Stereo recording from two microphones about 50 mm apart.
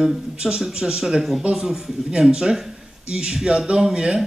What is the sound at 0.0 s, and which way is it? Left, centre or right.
A man's voice, centre.